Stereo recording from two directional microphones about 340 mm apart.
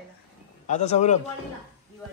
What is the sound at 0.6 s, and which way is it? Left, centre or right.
Speech, centre.